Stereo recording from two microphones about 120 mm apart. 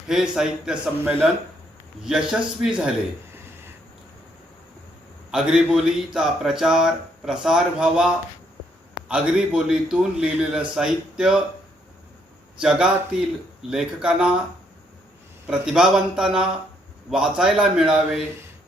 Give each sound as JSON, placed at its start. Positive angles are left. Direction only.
{"t": 0.1, "sound": "a man's voice", "side_deg": -5}
{"t": 5.3, "sound": "a man's voice", "side_deg": -5}
{"t": 12.5, "sound": "a man's voice", "side_deg": -10}
{"t": 15.4, "sound": "a man's voice", "side_deg": -5}